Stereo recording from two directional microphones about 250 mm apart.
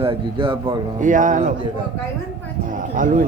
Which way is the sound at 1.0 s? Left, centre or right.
Right.